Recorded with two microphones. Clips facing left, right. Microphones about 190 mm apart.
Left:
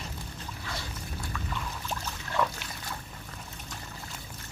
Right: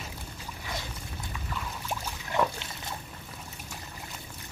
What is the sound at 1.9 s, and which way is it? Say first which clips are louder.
Boat: right 3 dB; 15° right (ahead or behind).